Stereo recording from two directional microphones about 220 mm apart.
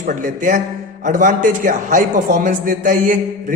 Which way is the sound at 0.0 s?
35° right (ahead or behind).